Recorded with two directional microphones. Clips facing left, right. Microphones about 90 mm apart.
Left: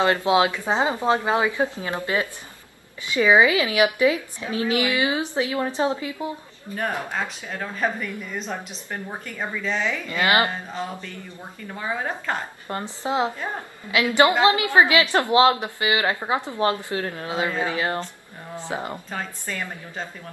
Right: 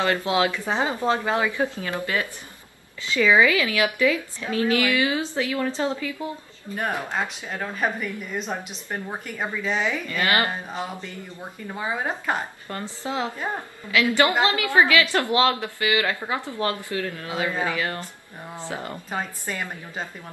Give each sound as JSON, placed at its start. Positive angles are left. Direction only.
{"t": 0.0, "sound": "a woman's voice", "side_deg": 20}
{"t": 7.1, "sound": "speech", "side_deg": -10}
{"t": 10.0, "sound": "a woman's voice", "side_deg": 20}
{"t": 10.7, "sound": "speech", "side_deg": -15}
{"t": 12.6, "sound": "a woman's voice", "side_deg": 20}
{"t": 19.0, "sound": "speech", "side_deg": -15}